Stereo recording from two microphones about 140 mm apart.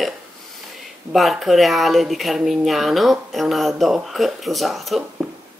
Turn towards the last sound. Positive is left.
turn(degrees=0)  # may be behind; listen again after turning